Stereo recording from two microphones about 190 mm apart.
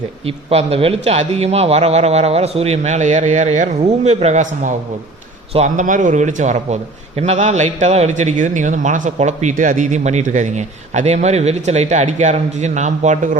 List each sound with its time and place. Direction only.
0.3 s a man's voice: 30° right (ahead or behind)